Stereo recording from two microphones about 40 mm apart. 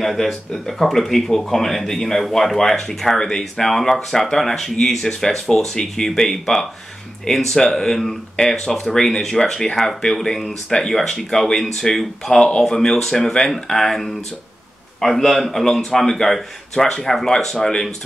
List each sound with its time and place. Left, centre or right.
0.0 s a man's voice: centre